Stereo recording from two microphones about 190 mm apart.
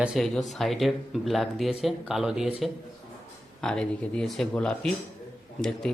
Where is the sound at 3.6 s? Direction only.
5° left (ahead or behind).